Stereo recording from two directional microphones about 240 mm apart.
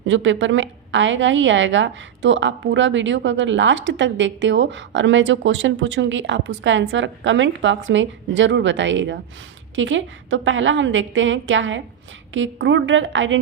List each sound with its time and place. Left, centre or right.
0.0 s a woman's voice: right